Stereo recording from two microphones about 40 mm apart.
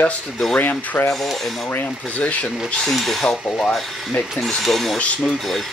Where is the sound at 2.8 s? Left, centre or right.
Centre.